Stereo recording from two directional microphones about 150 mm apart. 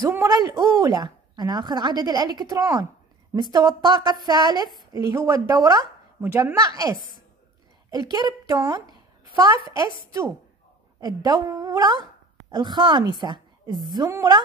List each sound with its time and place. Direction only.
0.0 s a woman's voice: 20° right (ahead or behind)
11.0 s speech: 25° right (ahead or behind)